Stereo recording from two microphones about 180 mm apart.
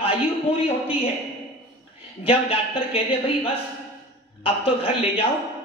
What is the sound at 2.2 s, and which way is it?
A man's voice, 30° left (ahead or behind).